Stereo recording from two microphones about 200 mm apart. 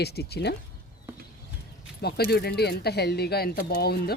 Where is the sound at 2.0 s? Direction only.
50° left (ahead or behind).